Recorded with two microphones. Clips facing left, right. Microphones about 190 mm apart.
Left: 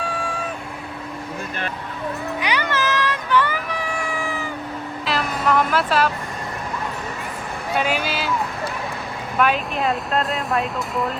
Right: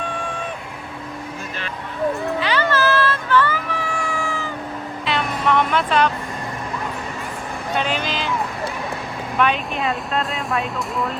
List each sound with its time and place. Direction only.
0.0 s vehicle: 5° left (ahead or behind)
2.4 s vehicle: 15° left (ahead or behind)
5.0 s music: centre (ahead or behind)
7.7 s music: 5° left (ahead or behind)
9.4 s speech: centre (ahead or behind)